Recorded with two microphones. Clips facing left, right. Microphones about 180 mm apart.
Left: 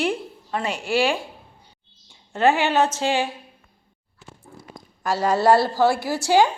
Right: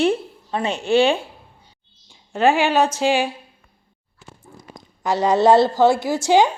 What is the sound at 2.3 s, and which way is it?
Speech, 15° right (ahead or behind).